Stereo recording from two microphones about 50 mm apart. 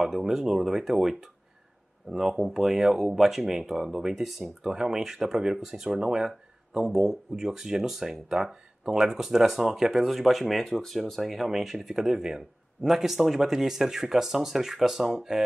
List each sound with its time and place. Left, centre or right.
0.0 s speech: centre